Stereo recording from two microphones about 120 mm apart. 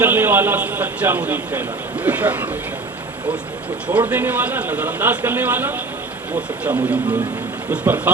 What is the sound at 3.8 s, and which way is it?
A man's voice, 15° right (ahead or behind).